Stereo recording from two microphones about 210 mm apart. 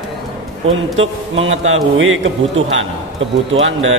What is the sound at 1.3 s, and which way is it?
Speech, 70° right (ahead or behind).